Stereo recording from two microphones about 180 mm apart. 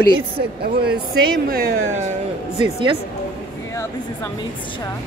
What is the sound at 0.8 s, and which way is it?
Speech, 60° right (ahead or behind).